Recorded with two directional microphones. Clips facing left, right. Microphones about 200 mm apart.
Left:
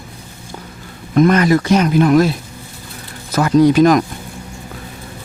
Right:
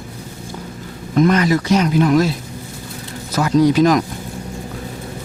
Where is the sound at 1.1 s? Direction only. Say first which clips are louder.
Left 3 dB; 55° left (ahead or behind).